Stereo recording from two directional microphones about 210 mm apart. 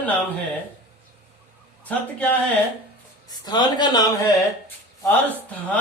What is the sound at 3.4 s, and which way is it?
Speech, 20° left (ahead or behind).